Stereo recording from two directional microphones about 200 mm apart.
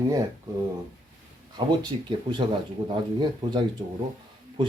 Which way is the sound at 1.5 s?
20° right (ahead or behind).